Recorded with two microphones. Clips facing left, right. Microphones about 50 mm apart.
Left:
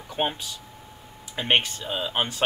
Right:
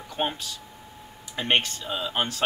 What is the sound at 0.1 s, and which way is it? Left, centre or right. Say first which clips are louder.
Speech: left 1 dB; centre.